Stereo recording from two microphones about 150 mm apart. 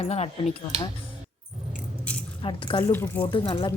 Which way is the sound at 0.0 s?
45° left (ahead or behind).